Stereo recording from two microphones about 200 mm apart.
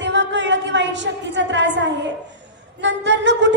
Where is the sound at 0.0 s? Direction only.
60° right (ahead or behind).